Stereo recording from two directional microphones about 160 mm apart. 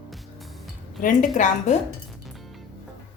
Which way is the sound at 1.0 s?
55° left (ahead or behind).